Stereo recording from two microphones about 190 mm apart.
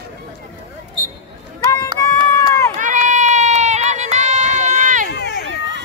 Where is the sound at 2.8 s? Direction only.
40° right (ahead or behind).